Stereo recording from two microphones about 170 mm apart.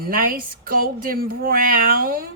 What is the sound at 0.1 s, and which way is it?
Speech, 60° right (ahead or behind).